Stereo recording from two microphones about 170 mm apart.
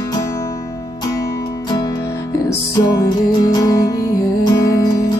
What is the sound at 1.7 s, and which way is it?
Music, 25° left (ahead or behind).